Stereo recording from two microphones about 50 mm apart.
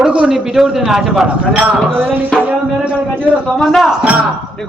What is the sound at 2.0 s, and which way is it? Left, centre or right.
Speech, centre.